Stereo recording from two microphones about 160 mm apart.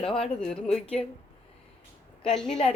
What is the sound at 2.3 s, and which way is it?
Speech, 5° left (ahead or behind).